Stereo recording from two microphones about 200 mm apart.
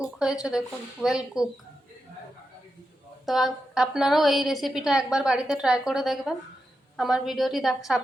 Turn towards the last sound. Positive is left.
turn(degrees=0)  # may be behind; listen again after turning